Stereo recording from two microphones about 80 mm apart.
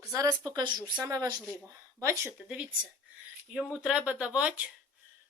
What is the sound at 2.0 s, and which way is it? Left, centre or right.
Speech, right.